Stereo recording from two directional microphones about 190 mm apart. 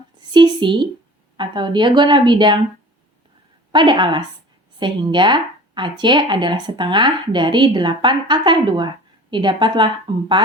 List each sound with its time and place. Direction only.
0.3 s a woman's voice: 25° right (ahead or behind)
3.7 s speech: 25° right (ahead or behind)